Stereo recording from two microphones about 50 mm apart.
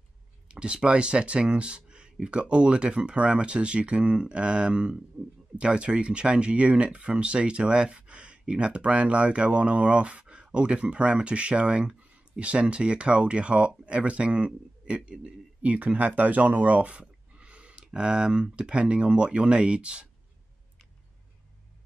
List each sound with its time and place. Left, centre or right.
0.5 s speech: centre